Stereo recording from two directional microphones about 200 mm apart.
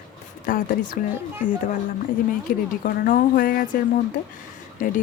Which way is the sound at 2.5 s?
45° left (ahead or behind).